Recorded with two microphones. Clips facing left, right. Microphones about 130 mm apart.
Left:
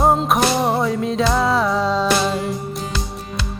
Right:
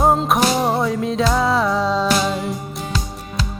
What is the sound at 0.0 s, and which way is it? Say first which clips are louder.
Music: even; centre (ahead or behind).